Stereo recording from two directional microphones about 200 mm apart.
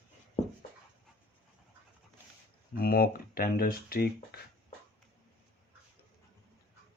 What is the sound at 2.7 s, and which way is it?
Speech, 50° left (ahead or behind).